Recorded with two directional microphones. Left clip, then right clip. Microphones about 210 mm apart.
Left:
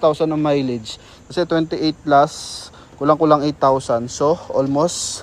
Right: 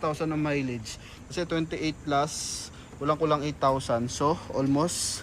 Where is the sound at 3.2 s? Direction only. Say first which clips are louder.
Left 11 dB; 30° left (ahead or behind).